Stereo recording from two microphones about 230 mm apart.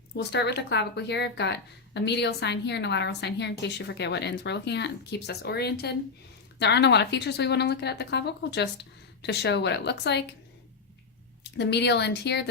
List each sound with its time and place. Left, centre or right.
0.2 s a woman's voice: left
11.5 s a woman's voice: left